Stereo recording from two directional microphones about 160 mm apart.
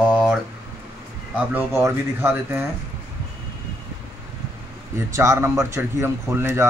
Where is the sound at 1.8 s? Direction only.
15° right (ahead or behind).